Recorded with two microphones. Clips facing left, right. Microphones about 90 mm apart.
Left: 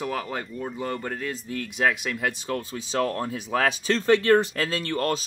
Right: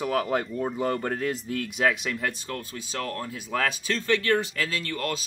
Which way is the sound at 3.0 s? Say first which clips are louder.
Left 5 dB; 30° left (ahead or behind).